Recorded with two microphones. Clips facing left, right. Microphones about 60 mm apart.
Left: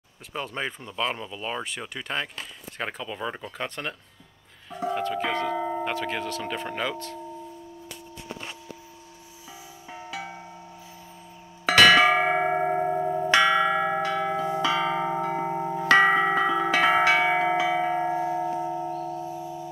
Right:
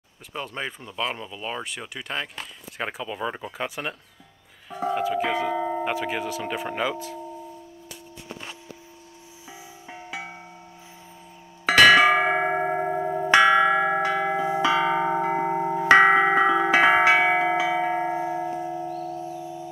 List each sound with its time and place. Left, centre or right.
0.3 s speech: centre
9.8 s music: centre
11.6 s tubular bells: centre
15.1 s tubular bells: right; by 18.9 s centre
18.9 s a sound: left